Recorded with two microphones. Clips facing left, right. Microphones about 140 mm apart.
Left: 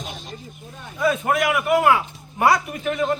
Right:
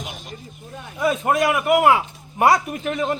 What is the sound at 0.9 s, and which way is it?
A man's voice, 20° right (ahead or behind).